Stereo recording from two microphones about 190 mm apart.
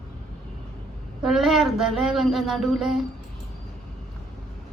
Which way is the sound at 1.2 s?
Centre (ahead or behind).